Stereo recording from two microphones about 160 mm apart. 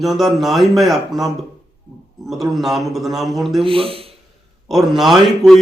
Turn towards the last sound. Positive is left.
turn(degrees=0)  # may be behind; listen again after turning